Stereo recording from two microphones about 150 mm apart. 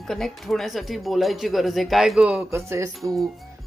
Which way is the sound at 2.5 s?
20° right (ahead or behind).